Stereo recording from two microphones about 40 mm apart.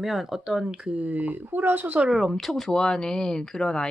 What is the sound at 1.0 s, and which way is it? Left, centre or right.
Speech, right.